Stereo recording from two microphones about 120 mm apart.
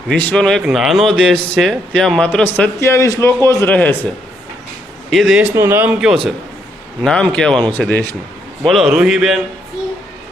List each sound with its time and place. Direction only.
0.1 s a man's voice: 10° left (ahead or behind)
5.1 s a man's voice: centre (ahead or behind)
5.5 s a man's voice: 20° right (ahead or behind); by 8.0 s 10° left (ahead or behind)
8.6 s a man's voice: centre (ahead or behind)